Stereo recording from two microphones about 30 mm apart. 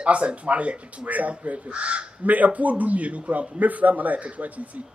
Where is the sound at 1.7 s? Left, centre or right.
Right.